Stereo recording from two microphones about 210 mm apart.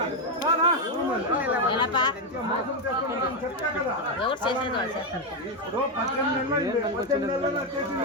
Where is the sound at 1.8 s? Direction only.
20° left (ahead or behind).